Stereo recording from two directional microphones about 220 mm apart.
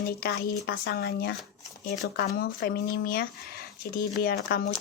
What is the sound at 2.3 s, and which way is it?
Speech, 45° left (ahead or behind).